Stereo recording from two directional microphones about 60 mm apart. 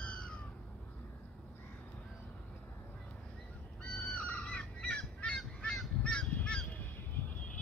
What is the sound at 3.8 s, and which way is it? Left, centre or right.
Crow, left.